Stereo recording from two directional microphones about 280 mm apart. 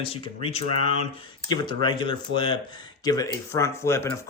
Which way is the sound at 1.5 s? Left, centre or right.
Centre.